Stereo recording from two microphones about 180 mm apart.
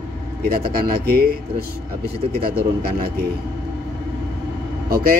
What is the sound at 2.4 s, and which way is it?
Speech, 60° right (ahead or behind).